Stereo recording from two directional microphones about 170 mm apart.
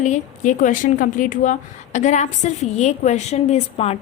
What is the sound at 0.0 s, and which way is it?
A woman's voice, 45° left (ahead or behind).